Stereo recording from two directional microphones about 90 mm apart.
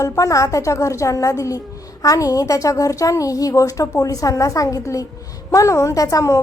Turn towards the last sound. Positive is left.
turn(degrees=40)  # may be behind; listen again after turning